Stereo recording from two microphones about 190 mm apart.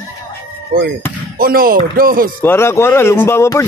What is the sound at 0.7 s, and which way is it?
Speech, 50° right (ahead or behind).